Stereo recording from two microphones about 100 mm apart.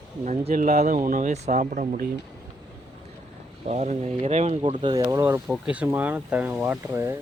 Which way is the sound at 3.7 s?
90° right.